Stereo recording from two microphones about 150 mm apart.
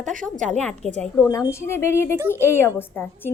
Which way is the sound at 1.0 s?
20° left (ahead or behind).